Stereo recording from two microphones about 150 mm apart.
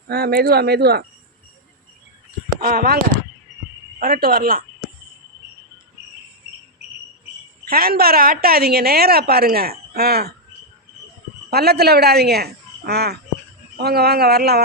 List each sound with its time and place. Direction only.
0.1 s a woman's voice: 90° right
2.6 s speech: 80° right
4.0 s speech: 80° right
7.7 s a woman's voice: 90° right
11.5 s a woman's voice: 90° right